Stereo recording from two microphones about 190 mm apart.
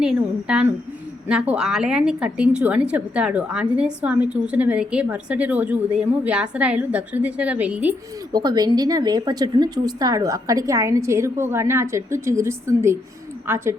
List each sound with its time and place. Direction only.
0.0 s a woman's voice: 5° right (ahead or behind)
8.3 s a woman's voice: 20° right (ahead or behind)